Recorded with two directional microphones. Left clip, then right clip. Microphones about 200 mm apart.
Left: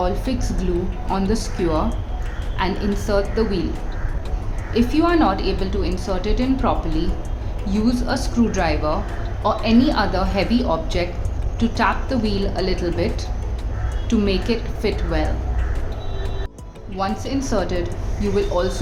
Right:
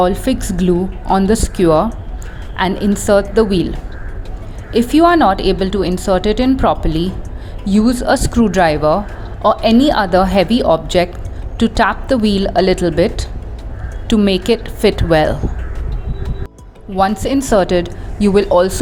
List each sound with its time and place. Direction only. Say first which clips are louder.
0.0 s a woman's voice: right 9 dB; 40° right (ahead or behind)
4.7 s a woman's voice: right 8 dB; 40° right (ahead or behind)
14.1 s speech: right 8 dB; 40° right (ahead or behind)
16.9 s speech: right 10 dB; 45° right (ahead or behind)